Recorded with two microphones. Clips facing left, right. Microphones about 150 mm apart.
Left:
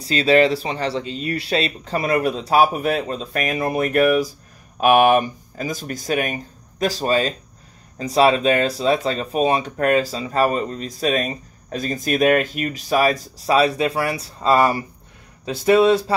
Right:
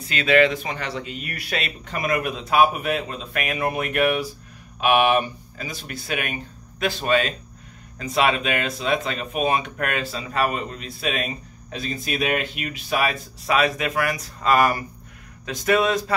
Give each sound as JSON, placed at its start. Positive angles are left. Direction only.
{"t": 0.0, "sound": "speech", "side_deg": 35}